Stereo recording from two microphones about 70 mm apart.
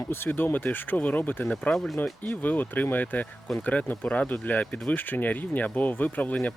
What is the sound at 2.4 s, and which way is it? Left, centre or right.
Speech, left.